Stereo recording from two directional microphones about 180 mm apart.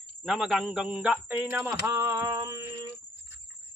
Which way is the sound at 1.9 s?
15° right (ahead or behind).